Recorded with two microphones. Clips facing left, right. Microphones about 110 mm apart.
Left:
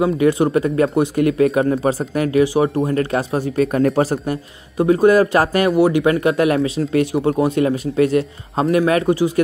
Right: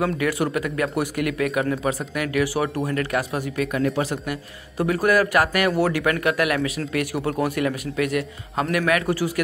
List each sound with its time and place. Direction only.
0.0 s speech: 25° left (ahead or behind)
4.7 s speech: 25° left (ahead or behind)